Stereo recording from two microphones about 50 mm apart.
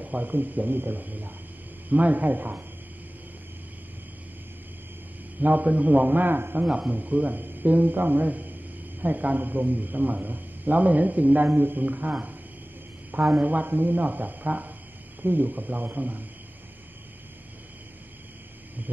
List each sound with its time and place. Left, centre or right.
0.0 s a man's voice: right
5.4 s a man's voice: right
6.9 s a man's voice: right